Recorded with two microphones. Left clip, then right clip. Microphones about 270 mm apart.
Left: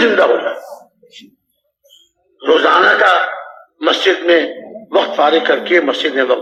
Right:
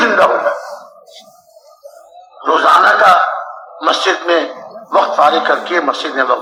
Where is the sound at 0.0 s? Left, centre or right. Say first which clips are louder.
Right 1 dB; centre.